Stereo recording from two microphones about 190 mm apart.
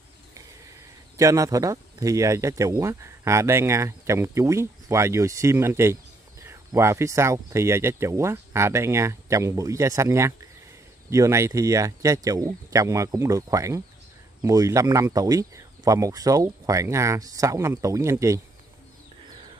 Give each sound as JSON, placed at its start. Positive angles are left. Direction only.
{"t": 1.1, "sound": "speech", "side_deg": -15}